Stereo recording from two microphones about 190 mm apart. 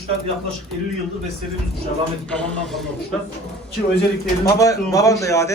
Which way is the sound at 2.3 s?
Centre (ahead or behind).